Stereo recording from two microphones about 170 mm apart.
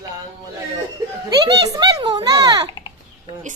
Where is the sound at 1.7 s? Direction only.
25° right (ahead or behind).